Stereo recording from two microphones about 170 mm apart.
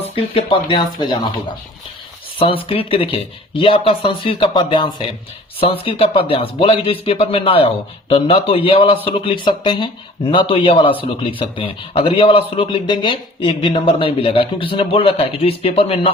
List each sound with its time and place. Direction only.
0.2 s speech: 30° left (ahead or behind)
2.4 s speech: 35° left (ahead or behind)